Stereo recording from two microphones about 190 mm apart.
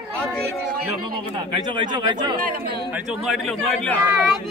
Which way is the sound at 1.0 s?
25° right (ahead or behind).